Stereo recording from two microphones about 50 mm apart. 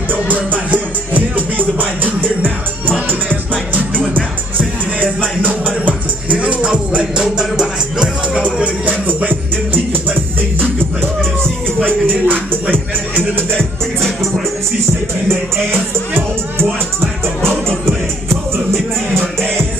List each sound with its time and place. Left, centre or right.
0.1 s music: right
5.4 s music: right
9.0 s music: right
11.8 s music: right
15.2 s music: right